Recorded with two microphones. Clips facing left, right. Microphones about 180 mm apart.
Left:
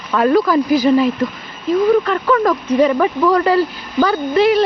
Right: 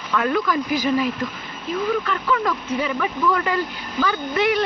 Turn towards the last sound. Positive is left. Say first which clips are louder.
# left 7 dB
turn(degrees=30)  # may be behind; listen again after turning